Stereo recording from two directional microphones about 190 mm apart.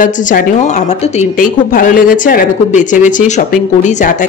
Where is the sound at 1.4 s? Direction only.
45° left (ahead or behind).